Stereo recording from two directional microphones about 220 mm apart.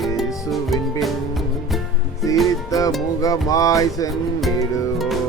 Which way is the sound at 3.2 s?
15° left (ahead or behind).